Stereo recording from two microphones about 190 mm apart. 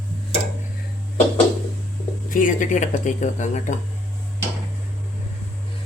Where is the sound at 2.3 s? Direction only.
45° left (ahead or behind).